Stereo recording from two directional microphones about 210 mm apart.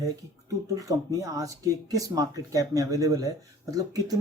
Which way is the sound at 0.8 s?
15° right (ahead or behind).